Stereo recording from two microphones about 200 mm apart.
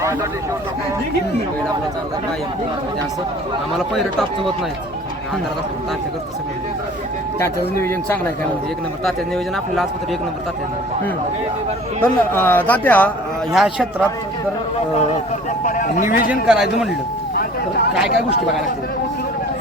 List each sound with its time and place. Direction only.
7.3 s speech: 15° left (ahead or behind)
12.0 s a man's voice: 10° left (ahead or behind)
15.6 s speech: 40° left (ahead or behind)
16.3 s a man's voice: 5° right (ahead or behind)